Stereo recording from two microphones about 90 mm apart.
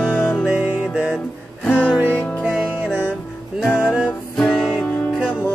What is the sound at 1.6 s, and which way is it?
Music, 20° left (ahead or behind).